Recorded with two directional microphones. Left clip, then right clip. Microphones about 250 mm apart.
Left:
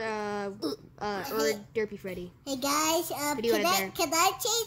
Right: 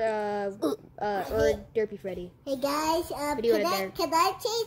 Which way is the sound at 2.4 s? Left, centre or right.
Left.